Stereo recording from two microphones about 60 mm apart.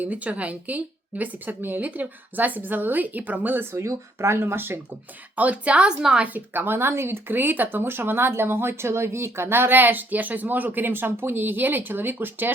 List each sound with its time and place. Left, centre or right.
0.0 s speech: right
5.4 s speech: right
6.0 s a woman's voice: centre
6.2 s speech: right